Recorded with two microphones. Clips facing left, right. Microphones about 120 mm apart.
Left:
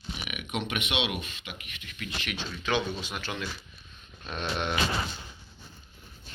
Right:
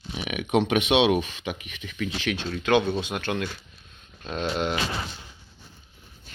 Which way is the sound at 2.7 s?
55° right (ahead or behind).